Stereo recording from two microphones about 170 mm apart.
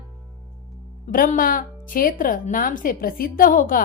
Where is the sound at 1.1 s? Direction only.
55° left (ahead or behind).